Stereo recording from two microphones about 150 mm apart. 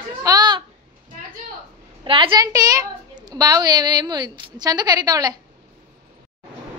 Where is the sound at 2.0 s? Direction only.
35° right (ahead or behind).